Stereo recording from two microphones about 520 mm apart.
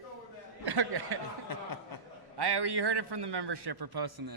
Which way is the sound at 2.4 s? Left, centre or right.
Right.